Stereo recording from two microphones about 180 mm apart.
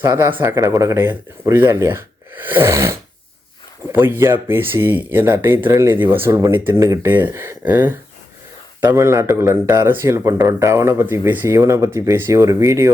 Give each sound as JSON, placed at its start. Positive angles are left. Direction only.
{"t": 0.0, "sound": "speech", "side_deg": -15}